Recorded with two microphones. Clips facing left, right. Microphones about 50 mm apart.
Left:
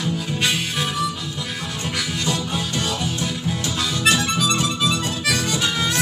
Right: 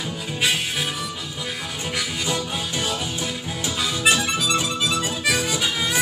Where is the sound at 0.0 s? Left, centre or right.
Centre.